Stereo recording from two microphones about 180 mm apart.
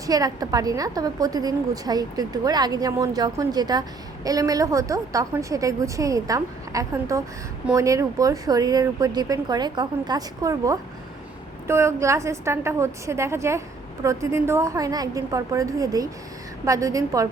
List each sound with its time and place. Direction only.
0.0 s a woman's voice: 20° right (ahead or behind)